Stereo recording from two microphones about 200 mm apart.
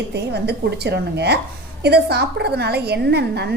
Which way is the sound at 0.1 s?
55° right (ahead or behind).